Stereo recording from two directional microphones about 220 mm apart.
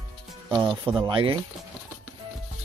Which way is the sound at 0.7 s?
5° right (ahead or behind).